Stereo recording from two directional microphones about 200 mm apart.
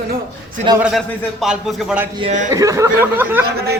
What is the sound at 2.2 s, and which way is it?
Speech, 30° right (ahead or behind).